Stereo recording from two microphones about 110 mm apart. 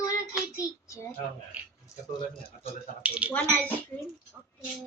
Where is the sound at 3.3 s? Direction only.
15° left (ahead or behind).